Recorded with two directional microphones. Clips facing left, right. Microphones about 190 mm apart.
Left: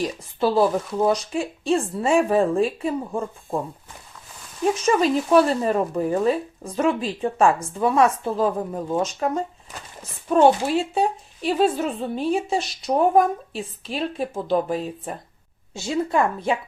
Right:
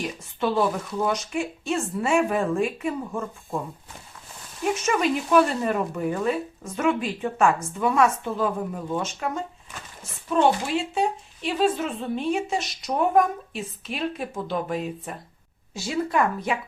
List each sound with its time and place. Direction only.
0.0 s speech: 35° left (ahead or behind)
4.6 s a woman's voice: 35° left (ahead or behind)